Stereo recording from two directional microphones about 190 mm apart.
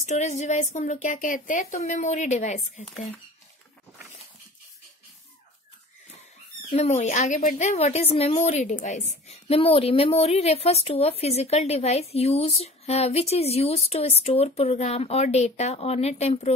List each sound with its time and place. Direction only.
0.0 s a woman's voice: 40° left (ahead or behind)
6.7 s a woman's voice: 35° left (ahead or behind)